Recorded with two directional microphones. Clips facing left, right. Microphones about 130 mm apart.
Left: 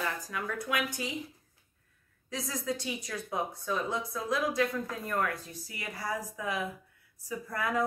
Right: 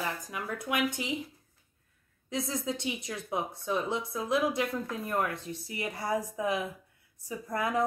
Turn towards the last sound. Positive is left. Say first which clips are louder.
# right 2 dB
turn(degrees=-20)  # may be behind; listen again after turning